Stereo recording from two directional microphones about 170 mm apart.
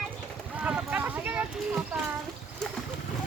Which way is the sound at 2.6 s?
5° left (ahead or behind).